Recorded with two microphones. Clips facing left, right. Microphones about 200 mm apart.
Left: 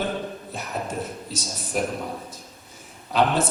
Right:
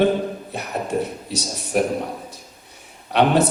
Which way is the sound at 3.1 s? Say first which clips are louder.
Right 5 dB; 65° right (ahead or behind).